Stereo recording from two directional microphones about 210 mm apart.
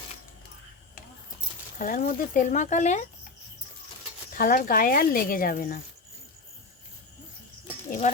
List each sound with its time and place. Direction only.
1.8 s speech: 40° left (ahead or behind)
4.4 s speech: 40° left (ahead or behind)
7.9 s speech: 35° left (ahead or behind)